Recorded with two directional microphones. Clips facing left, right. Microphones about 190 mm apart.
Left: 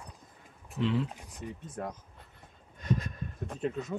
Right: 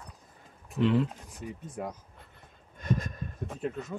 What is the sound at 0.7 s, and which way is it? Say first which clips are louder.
Speech: right 4 dB; 55° right (ahead or behind).